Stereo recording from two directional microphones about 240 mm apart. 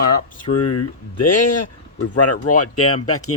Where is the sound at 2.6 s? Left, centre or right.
Left.